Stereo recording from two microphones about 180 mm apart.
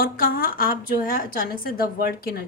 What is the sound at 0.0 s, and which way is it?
A woman's voice, 55° left (ahead or behind).